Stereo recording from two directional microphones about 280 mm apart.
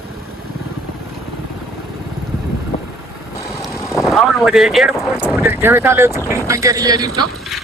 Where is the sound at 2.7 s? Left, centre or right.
Left.